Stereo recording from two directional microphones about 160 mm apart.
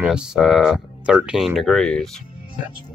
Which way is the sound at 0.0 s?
5° right (ahead or behind).